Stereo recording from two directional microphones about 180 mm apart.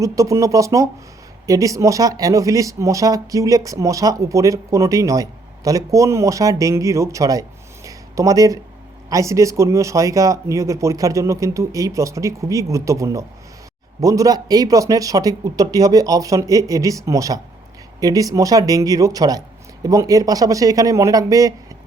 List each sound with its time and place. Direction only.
0.0 s speech: 15° right (ahead or behind)
7.9 s a sound: 20° right (ahead or behind)
9.0 s speech: 20° right (ahead or behind)